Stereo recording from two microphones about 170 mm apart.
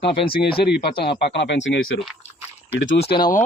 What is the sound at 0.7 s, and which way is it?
Speech, 75° left (ahead or behind).